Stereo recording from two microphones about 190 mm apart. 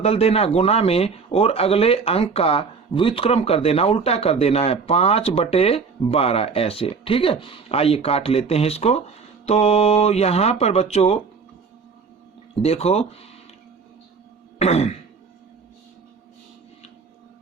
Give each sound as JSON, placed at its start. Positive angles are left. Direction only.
{"t": 0.0, "sound": "a man's voice", "side_deg": 30}
{"t": 12.6, "sound": "a man's voice", "side_deg": 30}
{"t": 14.6, "sound": "a man's voice", "side_deg": 35}